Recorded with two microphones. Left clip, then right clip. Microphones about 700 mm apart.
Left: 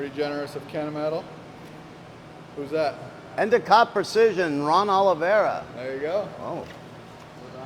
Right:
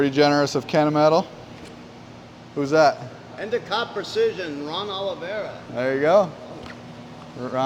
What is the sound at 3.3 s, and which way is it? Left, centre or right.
A man's voice, left.